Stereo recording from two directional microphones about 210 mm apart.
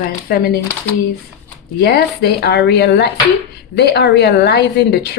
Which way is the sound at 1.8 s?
50° left (ahead or behind).